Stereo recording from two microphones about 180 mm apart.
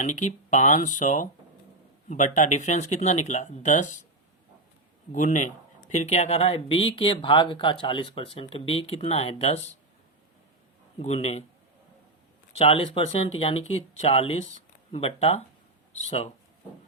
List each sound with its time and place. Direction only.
0.0 s speech: 40° left (ahead or behind)
5.1 s speech: 45° left (ahead or behind)
11.0 s speech: 35° left (ahead or behind)
12.5 s speech: 35° left (ahead or behind)